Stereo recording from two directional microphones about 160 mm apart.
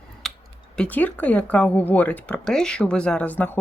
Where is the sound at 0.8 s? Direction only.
10° left (ahead or behind).